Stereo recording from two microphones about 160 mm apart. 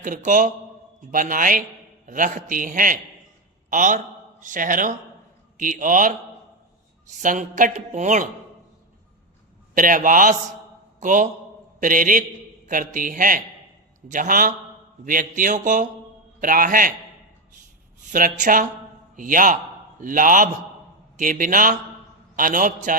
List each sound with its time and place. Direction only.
0.0 s a woman's voice: 55° right (ahead or behind)
9.7 s a man's voice: 55° right (ahead or behind)
18.0 s a man's voice: 55° right (ahead or behind)